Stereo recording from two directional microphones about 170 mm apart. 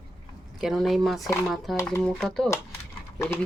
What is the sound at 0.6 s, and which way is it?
Speech, centre (ahead or behind).